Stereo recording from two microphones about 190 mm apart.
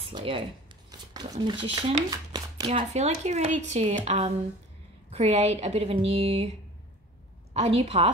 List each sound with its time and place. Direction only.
0.1 s speech: 30° right (ahead or behind)
1.5 s speech: 25° right (ahead or behind)
2.8 s a woman's voice: 35° right (ahead or behind)
7.5 s a woman's voice: 30° right (ahead or behind)